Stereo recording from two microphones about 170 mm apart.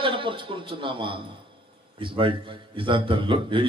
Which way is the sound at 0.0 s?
30° right (ahead or behind).